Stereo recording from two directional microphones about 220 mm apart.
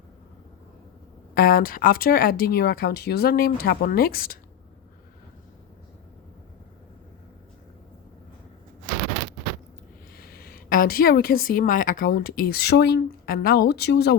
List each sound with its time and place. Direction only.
1.4 s a woman's voice: 40° left (ahead or behind)
10.2 s a woman's voice: 45° left (ahead or behind)